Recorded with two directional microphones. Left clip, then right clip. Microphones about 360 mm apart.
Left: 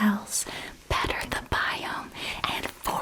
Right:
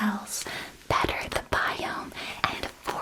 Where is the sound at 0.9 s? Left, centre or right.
Left.